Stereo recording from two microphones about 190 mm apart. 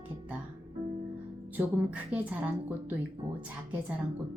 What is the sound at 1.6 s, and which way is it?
A woman's voice, 5° right (ahead or behind).